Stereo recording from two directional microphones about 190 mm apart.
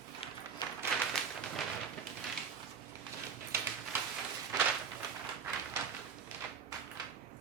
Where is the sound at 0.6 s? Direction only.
20° left (ahead or behind).